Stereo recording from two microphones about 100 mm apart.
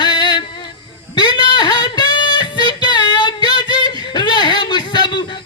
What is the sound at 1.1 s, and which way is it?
Music, 50° left (ahead or behind).